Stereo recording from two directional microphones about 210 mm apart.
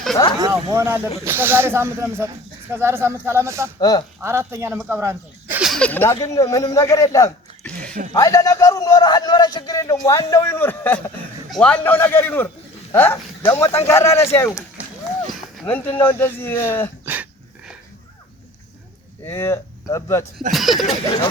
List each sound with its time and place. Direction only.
0.3 s speech: 15° right (ahead or behind)
3.8 s speech: 20° left (ahead or behind)
4.2 s speech: 10° right (ahead or behind); by 16.9 s 10° left (ahead or behind)
19.2 s speech: 10° left (ahead or behind)
20.5 s speech: centre (ahead or behind)